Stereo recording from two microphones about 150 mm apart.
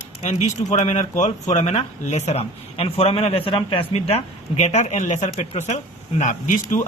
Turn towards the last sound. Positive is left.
turn(degrees=60)  # may be behind; listen again after turning